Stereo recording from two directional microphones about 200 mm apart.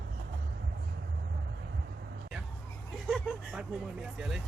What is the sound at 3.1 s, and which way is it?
Speech, centre (ahead or behind).